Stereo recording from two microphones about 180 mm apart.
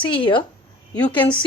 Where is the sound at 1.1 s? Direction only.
25° left (ahead or behind).